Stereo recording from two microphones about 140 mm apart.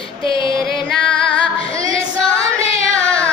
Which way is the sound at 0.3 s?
35° left (ahead or behind).